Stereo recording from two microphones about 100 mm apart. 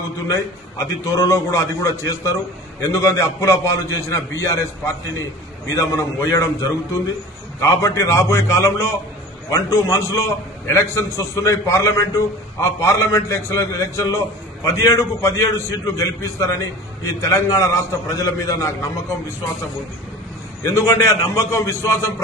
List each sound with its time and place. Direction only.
0.3 s a man's voice: 30° left (ahead or behind)
20.6 s a man's voice: 30° left (ahead or behind)